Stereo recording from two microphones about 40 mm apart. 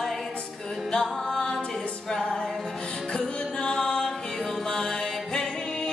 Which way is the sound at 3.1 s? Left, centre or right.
Centre.